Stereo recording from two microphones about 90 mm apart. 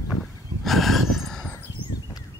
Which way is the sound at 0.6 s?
Centre (ahead or behind).